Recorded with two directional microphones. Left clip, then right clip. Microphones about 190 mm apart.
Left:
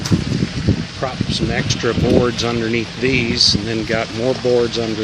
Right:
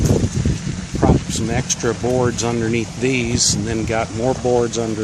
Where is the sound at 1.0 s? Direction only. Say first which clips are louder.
Right 3 dB; centre (ahead or behind).